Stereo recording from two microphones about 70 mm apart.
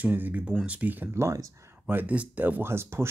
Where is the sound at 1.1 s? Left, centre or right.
Right.